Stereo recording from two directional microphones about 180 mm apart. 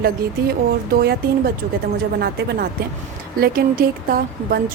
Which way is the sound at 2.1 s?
60° right (ahead or behind).